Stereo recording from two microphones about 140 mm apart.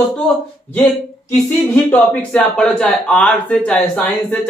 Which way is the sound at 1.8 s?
15° left (ahead or behind).